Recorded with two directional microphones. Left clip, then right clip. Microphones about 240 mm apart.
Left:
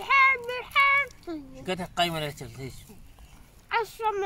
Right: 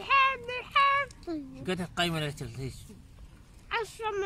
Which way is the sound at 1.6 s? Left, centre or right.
Centre.